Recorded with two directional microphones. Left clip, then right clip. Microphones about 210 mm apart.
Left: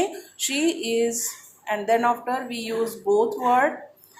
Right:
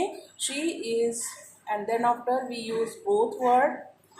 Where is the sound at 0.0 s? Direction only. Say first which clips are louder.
Left 4 dB; 15° left (ahead or behind).